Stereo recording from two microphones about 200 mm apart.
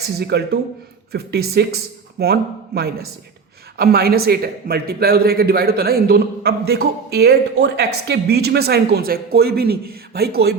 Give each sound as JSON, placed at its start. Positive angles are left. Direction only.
{"t": 0.2, "sound": "a man's voice", "side_deg": -55}